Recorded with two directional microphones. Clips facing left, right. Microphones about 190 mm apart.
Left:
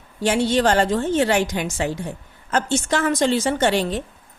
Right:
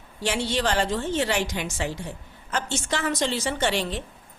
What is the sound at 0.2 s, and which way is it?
A woman's voice, 50° left (ahead or behind).